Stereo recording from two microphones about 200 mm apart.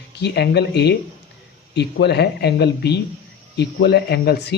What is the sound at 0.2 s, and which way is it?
A man's voice, 55° left (ahead or behind).